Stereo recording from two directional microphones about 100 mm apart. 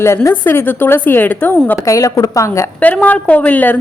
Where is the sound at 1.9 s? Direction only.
35° left (ahead or behind).